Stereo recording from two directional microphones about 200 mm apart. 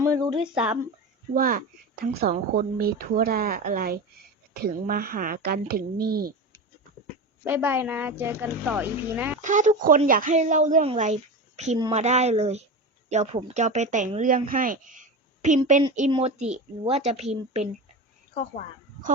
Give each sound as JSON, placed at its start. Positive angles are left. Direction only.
{"t": 0.0, "sound": "a sound", "side_deg": -15}
{"t": 0.5, "sound": "speech", "side_deg": -5}
{"t": 1.4, "sound": "speech", "side_deg": -45}
{"t": 7.4, "sound": "a woman's voice", "side_deg": -10}
{"t": 9.4, "sound": "a woman's voice", "side_deg": -40}